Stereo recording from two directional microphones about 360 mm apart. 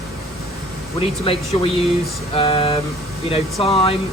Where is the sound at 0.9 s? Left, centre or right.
Centre.